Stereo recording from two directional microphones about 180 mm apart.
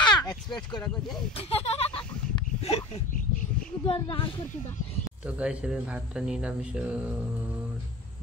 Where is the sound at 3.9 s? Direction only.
30° left (ahead or behind).